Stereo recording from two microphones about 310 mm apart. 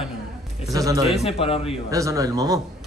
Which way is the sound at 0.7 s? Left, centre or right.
Centre.